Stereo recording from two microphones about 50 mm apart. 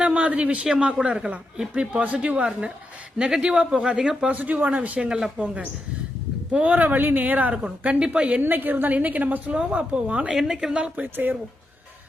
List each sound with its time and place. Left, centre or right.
0.0 s a woman's voice: right
4.4 s a woman's voice: right
5.0 s a woman's voice: centre
6.6 s a woman's voice: right
7.5 s speech: right
8.4 s a woman's voice: right
10.3 s a woman's voice: centre
10.8 s speech: right
11.0 s a woman's voice: right